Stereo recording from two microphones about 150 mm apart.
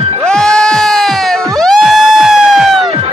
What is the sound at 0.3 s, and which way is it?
Sheep, 5° left (ahead or behind).